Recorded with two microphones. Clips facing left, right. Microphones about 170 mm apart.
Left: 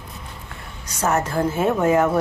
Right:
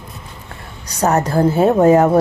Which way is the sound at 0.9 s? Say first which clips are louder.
Right 5 dB; 35° right (ahead or behind).